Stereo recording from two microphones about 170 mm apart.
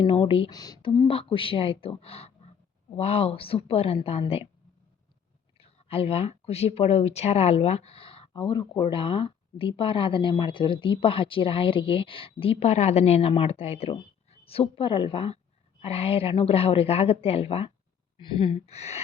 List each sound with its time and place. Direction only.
0.0 s speech: 35° left (ahead or behind)
0.5 s speech: 20° left (ahead or behind)
5.5 s speech: 35° left (ahead or behind)